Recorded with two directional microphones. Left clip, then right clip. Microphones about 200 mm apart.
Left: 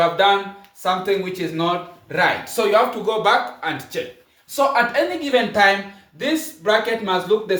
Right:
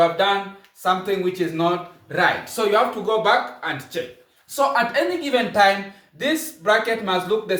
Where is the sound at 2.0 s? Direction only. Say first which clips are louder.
Left 1 dB; 30° left (ahead or behind).